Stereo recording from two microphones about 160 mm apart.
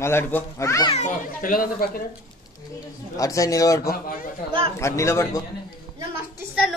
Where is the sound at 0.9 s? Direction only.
55° left (ahead or behind).